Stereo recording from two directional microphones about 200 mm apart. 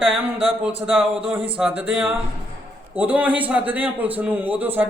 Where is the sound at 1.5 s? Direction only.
5° right (ahead or behind).